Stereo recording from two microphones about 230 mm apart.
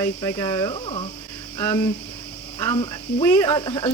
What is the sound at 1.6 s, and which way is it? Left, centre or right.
Speech, centre.